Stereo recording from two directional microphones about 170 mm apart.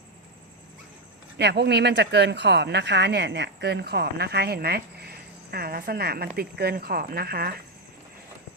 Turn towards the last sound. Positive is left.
turn(degrees=-65)  # may be behind; listen again after turning